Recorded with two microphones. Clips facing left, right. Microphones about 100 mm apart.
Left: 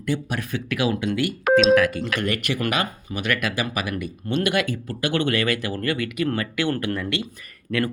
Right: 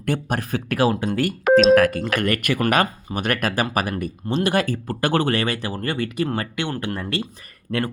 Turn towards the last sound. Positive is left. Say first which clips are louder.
# even
turn(degrees=-30)  # may be behind; listen again after turning